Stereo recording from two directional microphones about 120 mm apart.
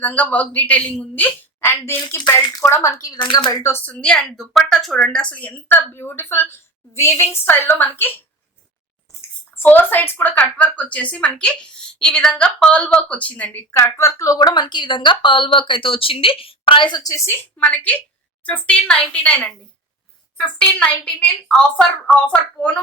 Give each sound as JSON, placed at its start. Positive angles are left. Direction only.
{"t": 0.0, "sound": "speech", "side_deg": 15}
{"t": 2.0, "sound": "speech", "side_deg": 40}
{"t": 2.6, "sound": "a woman's voice", "side_deg": 25}
{"t": 9.6, "sound": "speech", "side_deg": 15}
{"t": 14.3, "sound": "a woman's voice", "side_deg": 40}
{"t": 17.2, "sound": "speech", "side_deg": 10}